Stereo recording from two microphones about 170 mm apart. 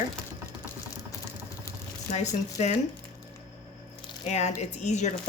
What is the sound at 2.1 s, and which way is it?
Speech, 40° left (ahead or behind).